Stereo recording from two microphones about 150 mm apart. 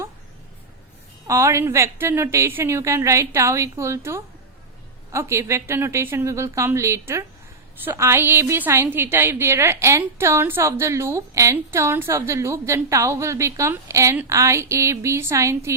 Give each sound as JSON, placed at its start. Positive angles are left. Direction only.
{"t": 1.3, "sound": "a woman's voice", "side_deg": -20}